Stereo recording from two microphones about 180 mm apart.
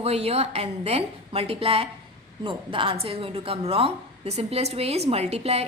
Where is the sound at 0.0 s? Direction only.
35° right (ahead or behind).